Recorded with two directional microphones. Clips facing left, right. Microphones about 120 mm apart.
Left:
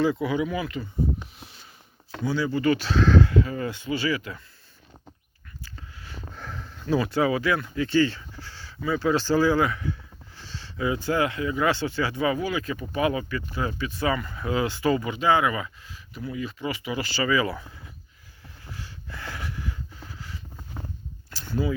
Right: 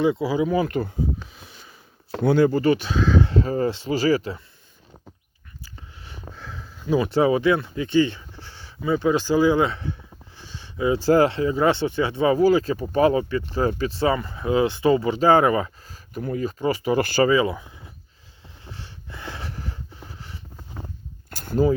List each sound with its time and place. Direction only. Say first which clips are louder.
0.0 s speech: right 3 dB; 25° right (ahead or behind)
0.7 s speech: right 9 dB; 60° right (ahead or behind)
2.2 s speech: right 9 dB; 55° right (ahead or behind)
2.7 s speech: even; 15° right (ahead or behind)
3.2 s speech: right 3 dB; 35° right (ahead or behind)
5.7 s a sound: even; 20° right (ahead or behind)
6.3 s a sound: left 1 dB; centre (ahead or behind)
7.0 s speech: right 7 dB; 25° right (ahead or behind)
10.3 s speech: right 2 dB; 15° right (ahead or behind); by 17.2 s 50° right (ahead or behind)
17.2 s speech: right 5 dB; 25° right (ahead or behind)
18.6 s a sound: even; 25° right (ahead or behind)
21.2 s a sound: right 7 dB; 50° right (ahead or behind)